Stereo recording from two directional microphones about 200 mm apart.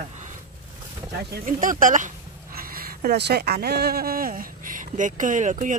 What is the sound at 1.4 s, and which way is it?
A woman's voice, 40° right (ahead or behind).